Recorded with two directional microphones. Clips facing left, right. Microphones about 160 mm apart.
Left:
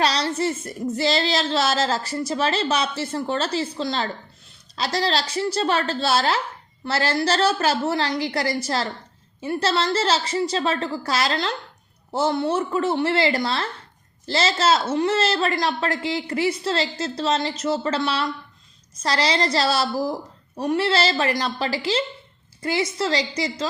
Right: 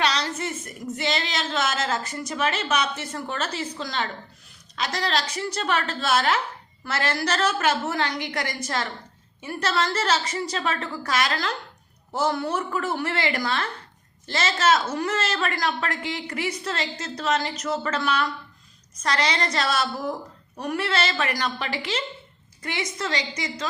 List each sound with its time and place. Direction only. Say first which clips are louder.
0.0 s a woman's voice: left 4 dB; 35° left (ahead or behind)